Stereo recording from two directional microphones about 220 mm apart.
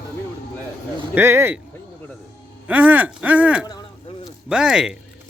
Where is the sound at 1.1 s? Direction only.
10° right (ahead or behind).